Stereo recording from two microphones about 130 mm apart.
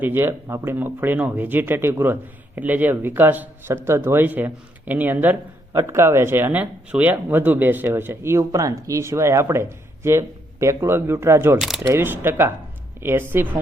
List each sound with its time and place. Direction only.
0.0 s speech: 15° right (ahead or behind)